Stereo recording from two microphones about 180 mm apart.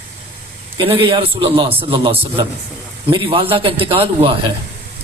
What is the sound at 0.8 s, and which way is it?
A man's voice, 30° right (ahead or behind).